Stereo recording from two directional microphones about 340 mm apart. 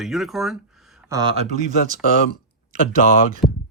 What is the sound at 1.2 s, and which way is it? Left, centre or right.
Speech, centre.